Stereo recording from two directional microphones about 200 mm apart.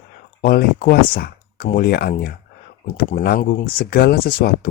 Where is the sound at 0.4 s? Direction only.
45° left (ahead or behind).